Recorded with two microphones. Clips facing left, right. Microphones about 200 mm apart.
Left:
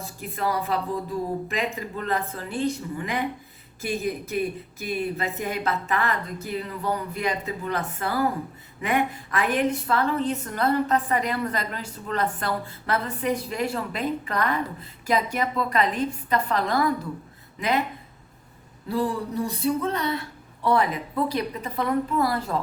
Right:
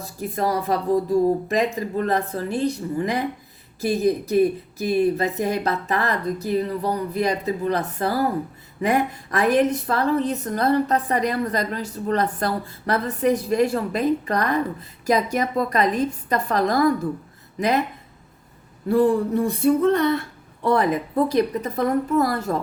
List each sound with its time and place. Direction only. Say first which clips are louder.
0.0 s a woman's voice: right 4 dB; 40° right (ahead or behind)
18.9 s a woman's voice: right 8 dB; 50° right (ahead or behind)